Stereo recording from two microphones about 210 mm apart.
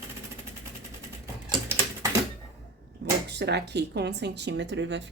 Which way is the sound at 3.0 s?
55° right (ahead or behind).